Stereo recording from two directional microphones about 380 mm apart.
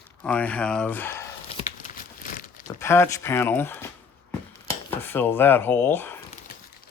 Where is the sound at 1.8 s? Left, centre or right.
Left.